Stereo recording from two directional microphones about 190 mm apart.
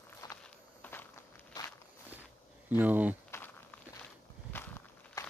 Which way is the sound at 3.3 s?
10° left (ahead or behind).